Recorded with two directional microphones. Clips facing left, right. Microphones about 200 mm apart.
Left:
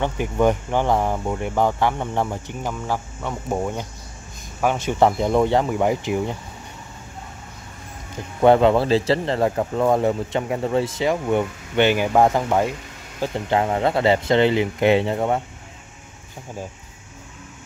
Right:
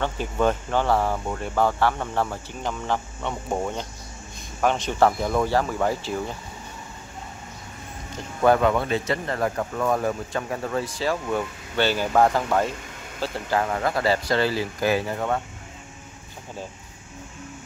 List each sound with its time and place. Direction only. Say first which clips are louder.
0.0 s speech: left 4 dB; 15° left (ahead or behind)
5.0 s speech: left 3 dB; 20° left (ahead or behind)
8.4 s speech: left 5 dB; 25° left (ahead or behind)